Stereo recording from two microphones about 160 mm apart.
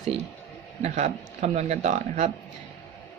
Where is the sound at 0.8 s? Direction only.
45° right (ahead or behind).